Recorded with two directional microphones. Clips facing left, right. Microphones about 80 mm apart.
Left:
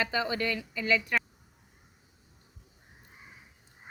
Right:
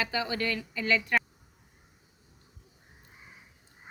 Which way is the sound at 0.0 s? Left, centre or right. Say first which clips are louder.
Left 1 dB; left.